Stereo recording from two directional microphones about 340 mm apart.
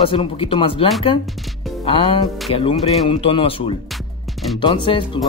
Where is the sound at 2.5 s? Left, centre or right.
Left.